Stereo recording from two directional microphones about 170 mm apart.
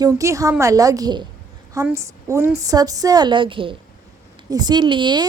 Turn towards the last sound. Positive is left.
turn(degrees=-25)  # may be behind; listen again after turning